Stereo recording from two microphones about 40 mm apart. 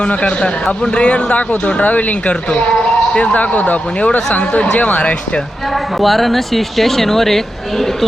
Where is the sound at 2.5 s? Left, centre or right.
Left.